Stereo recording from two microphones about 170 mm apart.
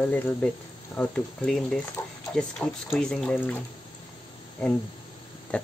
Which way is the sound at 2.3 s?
5° left (ahead or behind).